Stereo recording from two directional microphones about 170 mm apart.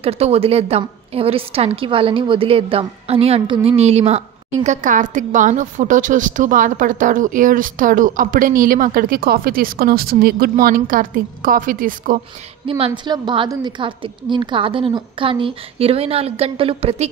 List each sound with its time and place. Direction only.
0.0 s a woman's voice: 35° right (ahead or behind)
4.6 s a woman's voice: 50° right (ahead or behind)
12.6 s a woman's voice: 30° right (ahead or behind)